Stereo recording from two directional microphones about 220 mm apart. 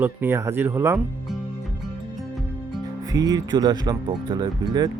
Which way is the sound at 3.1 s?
15° right (ahead or behind).